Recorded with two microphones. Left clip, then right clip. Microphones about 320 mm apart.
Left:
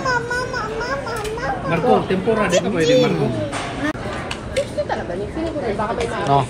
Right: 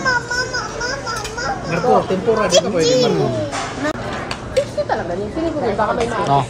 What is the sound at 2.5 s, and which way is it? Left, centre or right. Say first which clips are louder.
Speech: right 1 dB; right.